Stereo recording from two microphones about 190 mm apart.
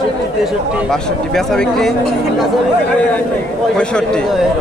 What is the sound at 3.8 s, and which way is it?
Speech, 5° left (ahead or behind).